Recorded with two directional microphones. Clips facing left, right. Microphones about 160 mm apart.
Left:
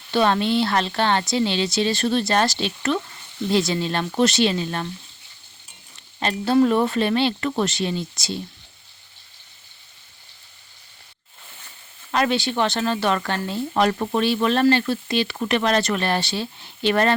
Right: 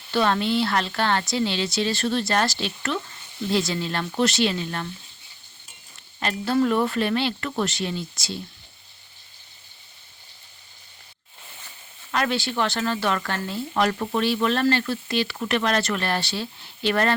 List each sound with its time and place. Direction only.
0.1 s speech: 20° left (ahead or behind)
6.1 s speech: 25° left (ahead or behind)
12.1 s speech: 20° left (ahead or behind)